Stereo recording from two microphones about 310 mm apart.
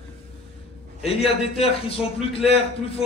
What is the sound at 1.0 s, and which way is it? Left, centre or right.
A man's voice, centre.